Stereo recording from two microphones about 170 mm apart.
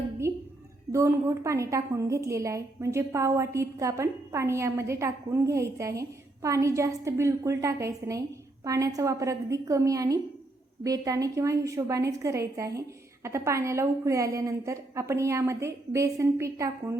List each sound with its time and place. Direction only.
0.9 s a woman's voice: 15° right (ahead or behind)